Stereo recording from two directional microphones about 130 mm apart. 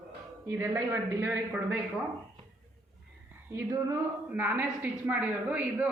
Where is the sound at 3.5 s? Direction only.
20° right (ahead or behind).